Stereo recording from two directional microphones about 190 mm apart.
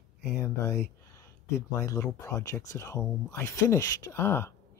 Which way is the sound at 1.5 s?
15° left (ahead or behind).